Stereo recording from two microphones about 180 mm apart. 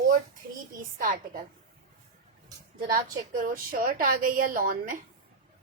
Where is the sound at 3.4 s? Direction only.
50° right (ahead or behind).